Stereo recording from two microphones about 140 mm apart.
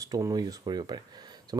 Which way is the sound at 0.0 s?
25° right (ahead or behind).